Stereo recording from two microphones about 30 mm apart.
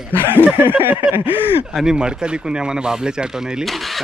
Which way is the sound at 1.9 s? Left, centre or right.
Right.